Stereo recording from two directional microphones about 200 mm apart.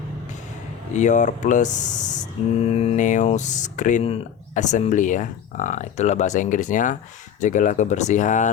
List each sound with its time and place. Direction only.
0.9 s speech: 35° left (ahead or behind)